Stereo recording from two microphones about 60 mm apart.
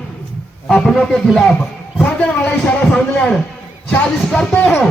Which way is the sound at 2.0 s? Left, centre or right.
Left.